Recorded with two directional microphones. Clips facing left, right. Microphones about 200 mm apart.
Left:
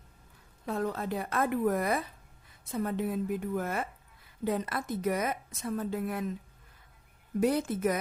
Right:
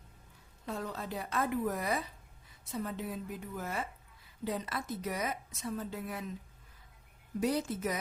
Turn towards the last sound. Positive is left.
turn(degrees=55)  # may be behind; listen again after turning